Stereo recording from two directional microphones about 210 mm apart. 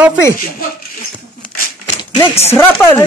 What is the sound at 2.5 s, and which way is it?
Speech, 10° left (ahead or behind).